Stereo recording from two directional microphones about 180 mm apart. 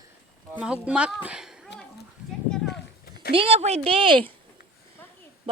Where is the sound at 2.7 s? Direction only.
60° left (ahead or behind).